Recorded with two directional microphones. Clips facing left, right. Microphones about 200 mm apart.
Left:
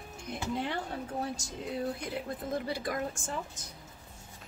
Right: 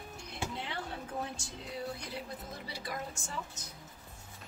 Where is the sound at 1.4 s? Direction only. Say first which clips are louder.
Left 3 dB; 40° left (ahead or behind).